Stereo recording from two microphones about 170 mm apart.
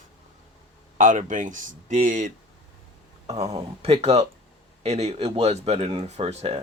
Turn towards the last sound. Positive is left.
turn(degrees=-40)  # may be behind; listen again after turning